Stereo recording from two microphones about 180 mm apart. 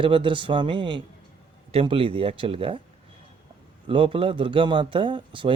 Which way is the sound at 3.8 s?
30° right (ahead or behind).